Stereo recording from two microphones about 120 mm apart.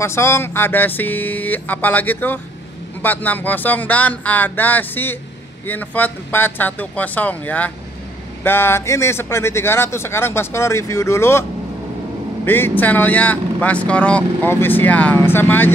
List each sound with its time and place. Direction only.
0.0 s speech: 20° left (ahead or behind)
12.4 s speech: 15° left (ahead or behind)